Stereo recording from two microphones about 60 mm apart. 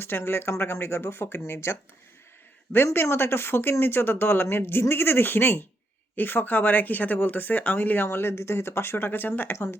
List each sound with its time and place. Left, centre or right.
0.0 s speech: left